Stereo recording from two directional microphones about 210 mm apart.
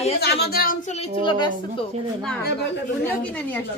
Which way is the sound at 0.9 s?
30° left (ahead or behind).